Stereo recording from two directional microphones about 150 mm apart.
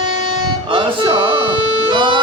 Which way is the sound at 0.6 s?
35° right (ahead or behind).